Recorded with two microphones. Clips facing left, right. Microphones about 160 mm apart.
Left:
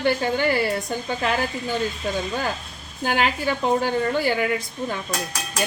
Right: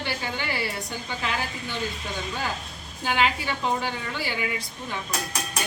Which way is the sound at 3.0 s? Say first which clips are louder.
Left 3 dB; 50° left (ahead or behind).